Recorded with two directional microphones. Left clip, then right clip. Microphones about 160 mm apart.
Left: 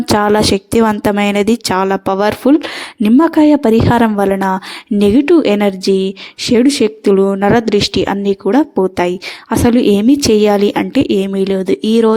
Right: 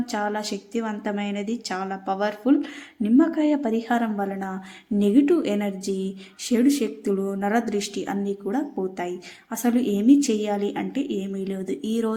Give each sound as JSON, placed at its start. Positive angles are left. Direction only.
{"t": 0.1, "sound": "a woman's voice", "side_deg": 70}